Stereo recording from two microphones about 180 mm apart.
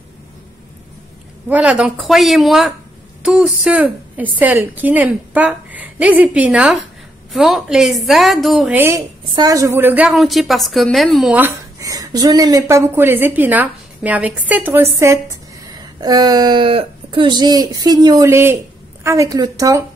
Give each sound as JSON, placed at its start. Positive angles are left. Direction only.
{"t": 1.5, "sound": "a woman's voice", "side_deg": -5}
{"t": 8.7, "sound": "a woman's voice", "side_deg": -15}